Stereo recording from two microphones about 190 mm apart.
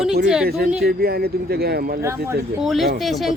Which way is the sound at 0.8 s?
55° right (ahead or behind).